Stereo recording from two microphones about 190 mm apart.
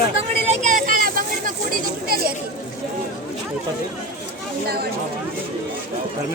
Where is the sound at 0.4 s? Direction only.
40° right (ahead or behind).